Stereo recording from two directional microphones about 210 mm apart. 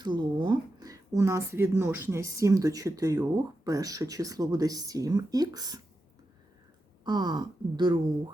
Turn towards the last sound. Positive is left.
turn(degrees=-20)  # may be behind; listen again after turning